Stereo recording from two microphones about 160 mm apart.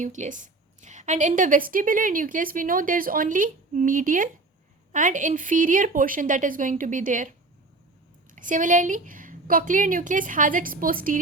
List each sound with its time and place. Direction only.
0.0 s a woman's voice: 50° right (ahead or behind)